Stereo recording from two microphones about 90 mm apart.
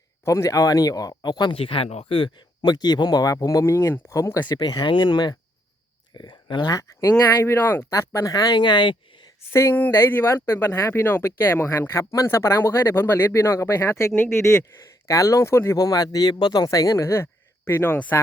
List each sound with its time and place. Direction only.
0.3 s speech: 35° left (ahead or behind); by 1.5 s 55° left (ahead or behind)
1.5 s speech: 90° left
2.6 s speech: 50° left (ahead or behind); by 4.4 s 35° left (ahead or behind)
4.4 s speech: 50° left (ahead or behind)
6.7 s speech: 40° left (ahead or behind)
7.4 s speech: 30° left (ahead or behind)
8.5 s speech: 60° left (ahead or behind)
9.5 s speech: 30° left (ahead or behind)
15.0 s speech: 40° left (ahead or behind); by 18.2 s 20° left (ahead or behind)